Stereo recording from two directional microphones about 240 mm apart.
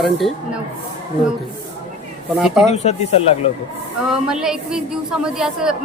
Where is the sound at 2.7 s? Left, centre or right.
Left.